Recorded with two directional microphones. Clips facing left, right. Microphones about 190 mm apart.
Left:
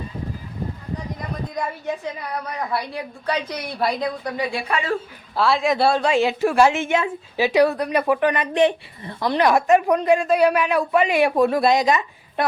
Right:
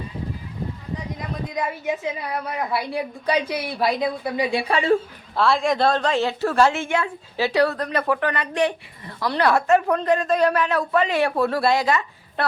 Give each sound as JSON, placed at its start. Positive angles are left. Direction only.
{"t": 1.5, "sound": "a woman's voice", "side_deg": -5}
{"t": 4.5, "sound": "speech", "side_deg": -30}
{"t": 5.4, "sound": "a woman's voice", "side_deg": 0}